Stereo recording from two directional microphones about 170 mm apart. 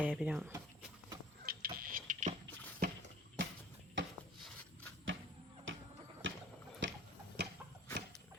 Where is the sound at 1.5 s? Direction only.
55° right (ahead or behind).